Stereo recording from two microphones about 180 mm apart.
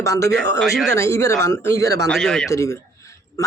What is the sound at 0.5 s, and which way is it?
Speech, centre (ahead or behind).